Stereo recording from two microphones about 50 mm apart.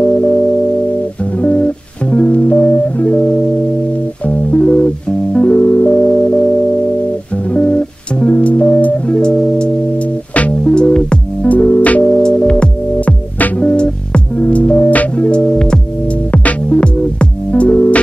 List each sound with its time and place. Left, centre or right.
0.0 s music: centre
1.4 s music: left
3.1 s music: centre
7.5 s music: centre
12.1 s music: centre